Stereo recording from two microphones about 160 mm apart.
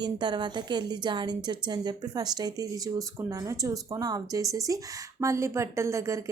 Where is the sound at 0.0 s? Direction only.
30° right (ahead or behind).